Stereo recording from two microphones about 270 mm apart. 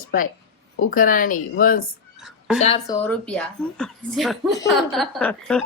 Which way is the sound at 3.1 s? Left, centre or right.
Centre.